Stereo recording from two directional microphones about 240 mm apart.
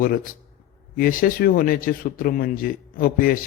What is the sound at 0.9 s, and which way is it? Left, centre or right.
Speech, left.